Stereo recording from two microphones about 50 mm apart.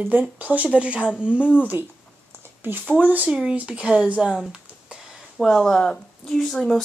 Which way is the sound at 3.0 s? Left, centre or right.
Right.